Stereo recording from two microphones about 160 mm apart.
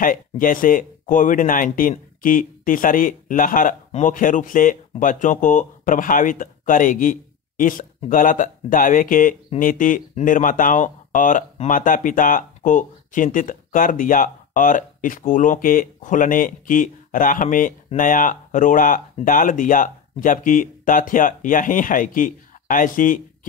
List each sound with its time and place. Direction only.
0.0 s speech: 60° left (ahead or behind)